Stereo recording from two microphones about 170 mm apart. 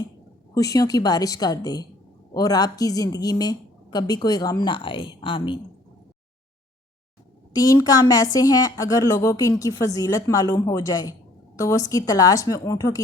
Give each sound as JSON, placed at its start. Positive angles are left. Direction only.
{"t": 0.5, "sound": "a woman's voice", "side_deg": 20}
{"t": 7.5, "sound": "a woman's voice", "side_deg": 20}